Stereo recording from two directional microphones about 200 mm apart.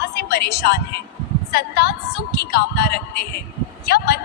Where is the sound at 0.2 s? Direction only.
50° left (ahead or behind).